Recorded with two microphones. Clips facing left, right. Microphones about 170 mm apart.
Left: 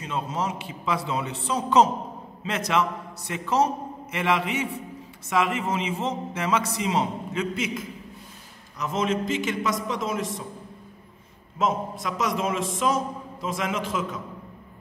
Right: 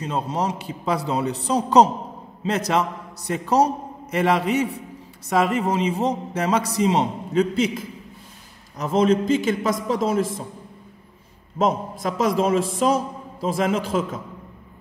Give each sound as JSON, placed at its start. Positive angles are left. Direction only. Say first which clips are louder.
{"t": 0.0, "sound": "a man's voice", "louder": "right 4 dB", "side_deg": -35}
{"t": 11.5, "sound": "a man's voice", "louder": "right 4 dB", "side_deg": -35}